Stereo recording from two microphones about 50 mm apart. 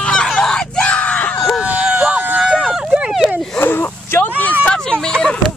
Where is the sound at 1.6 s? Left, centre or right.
Right.